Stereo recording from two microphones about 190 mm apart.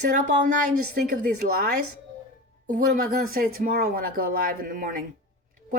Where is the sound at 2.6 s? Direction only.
55° right (ahead or behind).